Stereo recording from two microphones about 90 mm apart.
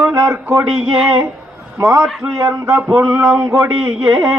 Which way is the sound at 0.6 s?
5° right (ahead or behind).